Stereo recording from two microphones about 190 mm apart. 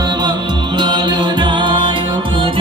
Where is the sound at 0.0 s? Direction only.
20° right (ahead or behind).